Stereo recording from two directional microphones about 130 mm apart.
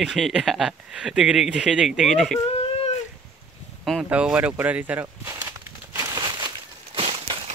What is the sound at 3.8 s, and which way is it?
Speech, centre (ahead or behind).